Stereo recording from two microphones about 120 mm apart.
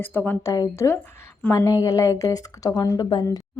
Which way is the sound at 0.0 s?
15° left (ahead or behind).